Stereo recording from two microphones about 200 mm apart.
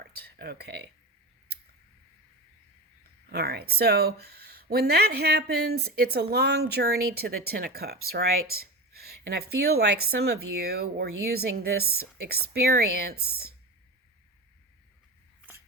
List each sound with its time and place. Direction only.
0.0 s speech: 55° right (ahead or behind)
3.3 s speech: 55° right (ahead or behind)